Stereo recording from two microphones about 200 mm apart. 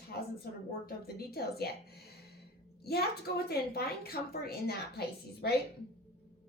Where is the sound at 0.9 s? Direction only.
50° left (ahead or behind).